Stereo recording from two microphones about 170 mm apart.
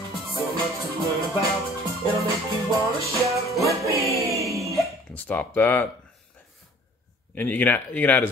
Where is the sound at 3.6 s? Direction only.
20° right (ahead or behind).